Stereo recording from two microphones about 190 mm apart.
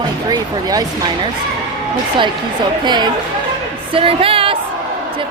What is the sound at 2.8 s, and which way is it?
A man's voice, 25° right (ahead or behind).